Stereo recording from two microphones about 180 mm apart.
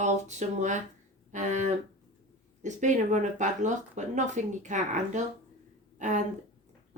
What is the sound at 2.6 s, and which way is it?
Speech, 45° right (ahead or behind).